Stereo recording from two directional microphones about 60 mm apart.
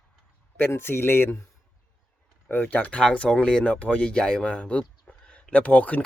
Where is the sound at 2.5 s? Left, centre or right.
Left.